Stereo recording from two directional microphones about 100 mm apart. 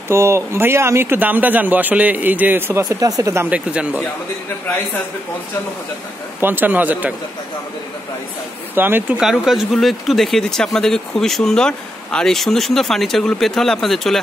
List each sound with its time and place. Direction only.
0.1 s speech: 25° right (ahead or behind)
2.8 s speech: 35° right (ahead or behind)
3.4 s speech: 10° right (ahead or behind)
6.4 s speech: 20° right (ahead or behind)
8.7 s speech: 20° right (ahead or behind)
9.2 s speech: 5° right (ahead or behind)